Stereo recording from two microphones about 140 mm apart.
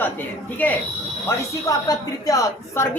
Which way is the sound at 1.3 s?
25° left (ahead or behind).